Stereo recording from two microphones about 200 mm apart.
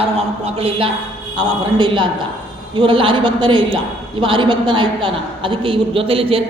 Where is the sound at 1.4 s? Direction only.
25° right (ahead or behind).